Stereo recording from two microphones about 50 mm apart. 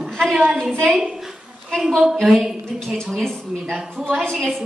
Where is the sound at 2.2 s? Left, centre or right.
Centre.